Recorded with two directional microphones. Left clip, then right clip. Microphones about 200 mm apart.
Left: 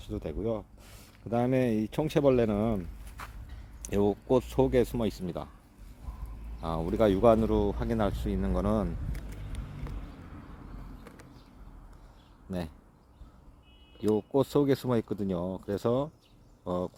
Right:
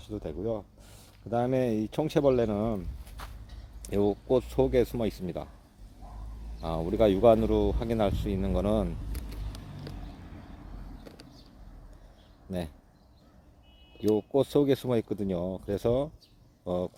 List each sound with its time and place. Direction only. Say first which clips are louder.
0.0 s speech: even; 15° left (ahead or behind)
3.8 s speech: even; 10° left (ahead or behind)
6.6 s speech: right 1 dB; 5° left (ahead or behind)
12.5 s speech: right 2 dB; centre (ahead or behind)
14.0 s speech: right 1 dB; centre (ahead or behind)